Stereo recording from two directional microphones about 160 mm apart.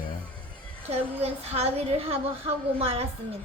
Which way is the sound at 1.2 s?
40° right (ahead or behind).